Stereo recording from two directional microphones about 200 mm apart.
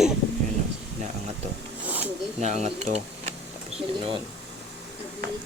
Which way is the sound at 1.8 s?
10° right (ahead or behind).